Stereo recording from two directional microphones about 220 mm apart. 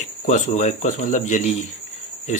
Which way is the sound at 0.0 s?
35° left (ahead or behind).